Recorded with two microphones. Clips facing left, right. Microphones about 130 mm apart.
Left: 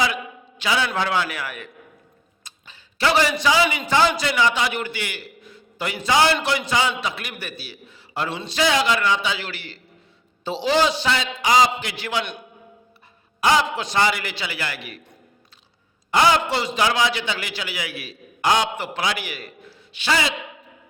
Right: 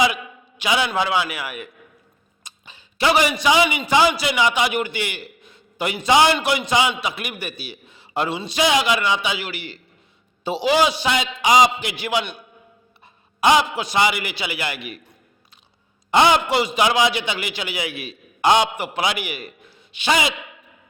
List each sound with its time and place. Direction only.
0.0 s a sound: 15° right (ahead or behind)
0.9 s a man's voice: 10° right (ahead or behind)
8.3 s a man's voice: 10° right (ahead or behind)
13.4 s a man's voice: 15° right (ahead or behind)
16.1 s a man's voice: 20° right (ahead or behind)